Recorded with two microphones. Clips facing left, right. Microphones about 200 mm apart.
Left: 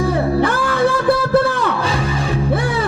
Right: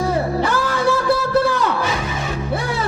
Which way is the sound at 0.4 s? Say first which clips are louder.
Left 2 dB; 55° left (ahead or behind).